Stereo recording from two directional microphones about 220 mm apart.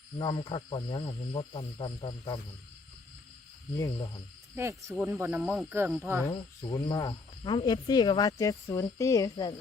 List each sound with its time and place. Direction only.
0.2 s speech: 20° left (ahead or behind)
4.6 s speech: 10° right (ahead or behind)
6.2 s cricket: 15° left (ahead or behind)
9.3 s speech: 20° left (ahead or behind)